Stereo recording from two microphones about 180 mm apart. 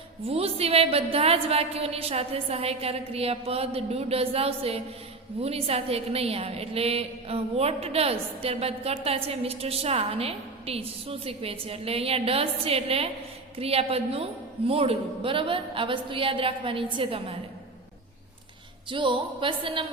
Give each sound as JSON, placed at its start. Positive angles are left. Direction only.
{"t": 0.3, "sound": "a woman's voice", "side_deg": -35}
{"t": 18.9, "sound": "a woman's voice", "side_deg": -25}